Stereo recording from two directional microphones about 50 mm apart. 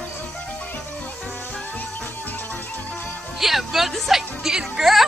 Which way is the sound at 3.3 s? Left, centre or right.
Centre.